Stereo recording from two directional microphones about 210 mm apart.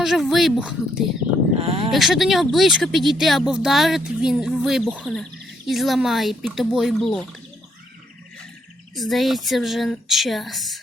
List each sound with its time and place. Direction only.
0.0 s speech: centre (ahead or behind)
1.5 s speech: 30° right (ahead or behind)
1.9 s speech: centre (ahead or behind)
9.0 s speech: centre (ahead or behind)